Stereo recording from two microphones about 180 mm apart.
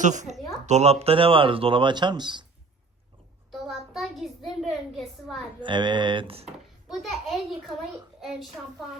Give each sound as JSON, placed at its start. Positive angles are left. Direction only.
{"t": 0.0, "sound": "speech", "side_deg": -40}
{"t": 3.5, "sound": "a sound", "side_deg": 0}
{"t": 5.5, "sound": "speech", "side_deg": -25}
{"t": 6.8, "sound": "a child's voice", "side_deg": 0}